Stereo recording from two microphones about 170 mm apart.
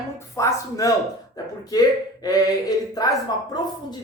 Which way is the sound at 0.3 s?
20° left (ahead or behind).